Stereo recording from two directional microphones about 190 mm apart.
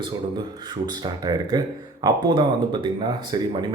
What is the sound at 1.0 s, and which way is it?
Speech, 20° right (ahead or behind).